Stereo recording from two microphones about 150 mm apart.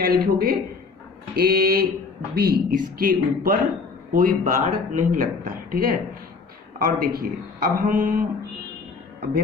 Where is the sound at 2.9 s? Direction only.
70° right (ahead or behind).